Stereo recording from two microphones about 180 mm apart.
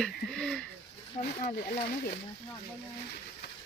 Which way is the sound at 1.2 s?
60° left (ahead or behind).